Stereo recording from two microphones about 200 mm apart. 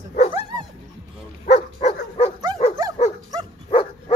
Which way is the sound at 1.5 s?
35° left (ahead or behind).